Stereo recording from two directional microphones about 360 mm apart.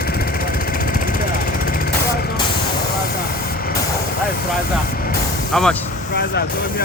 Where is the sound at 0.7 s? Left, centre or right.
Left.